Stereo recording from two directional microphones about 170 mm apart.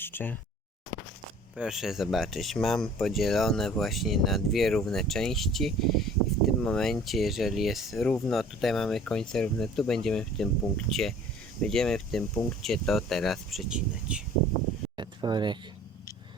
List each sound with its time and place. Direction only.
0.0 s speech: 10° left (ahead or behind)
1.5 s speech: 5° right (ahead or behind)
14.9 s a sound: 25° right (ahead or behind)